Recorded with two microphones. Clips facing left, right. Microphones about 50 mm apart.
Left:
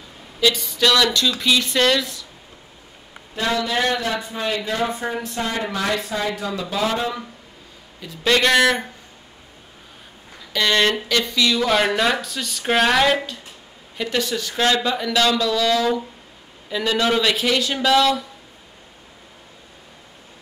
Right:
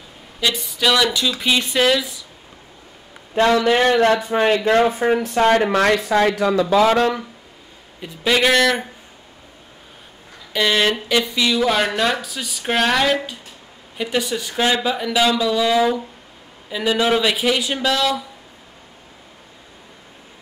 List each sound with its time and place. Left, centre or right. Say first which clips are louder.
0.7 s speech: right 3 dB; centre
1.8 s speech: right 1 dB; centre
3.3 s a man's voice: right 7 dB; right
4.3 s speech: right 8 dB; right
8.2 s speech: right 1 dB; centre
10.5 s speech: right 1 dB; centre
13.9 s speech: right 1 dB; centre